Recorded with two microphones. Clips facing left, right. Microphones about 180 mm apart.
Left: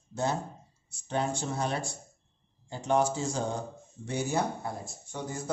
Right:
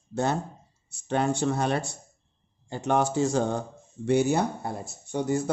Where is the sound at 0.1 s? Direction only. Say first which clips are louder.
Right 4 dB; 65° right (ahead or behind).